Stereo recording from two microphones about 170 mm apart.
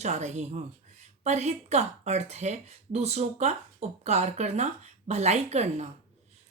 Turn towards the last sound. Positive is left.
turn(degrees=-40)  # may be behind; listen again after turning